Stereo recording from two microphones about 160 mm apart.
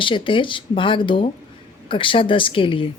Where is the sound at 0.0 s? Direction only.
30° left (ahead or behind).